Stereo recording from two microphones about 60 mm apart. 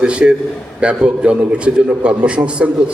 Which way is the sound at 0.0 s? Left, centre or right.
Centre.